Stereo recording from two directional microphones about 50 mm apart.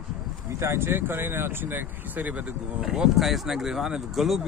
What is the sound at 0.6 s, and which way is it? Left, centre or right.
Speech, right.